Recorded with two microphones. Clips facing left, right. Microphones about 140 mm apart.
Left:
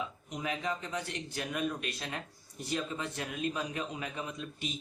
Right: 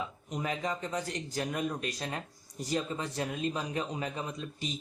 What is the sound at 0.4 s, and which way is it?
Speech, 40° right (ahead or behind).